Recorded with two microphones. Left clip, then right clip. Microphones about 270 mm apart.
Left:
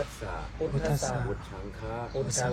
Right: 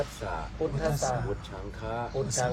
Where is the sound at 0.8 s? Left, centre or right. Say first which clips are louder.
Right 2 dB; centre.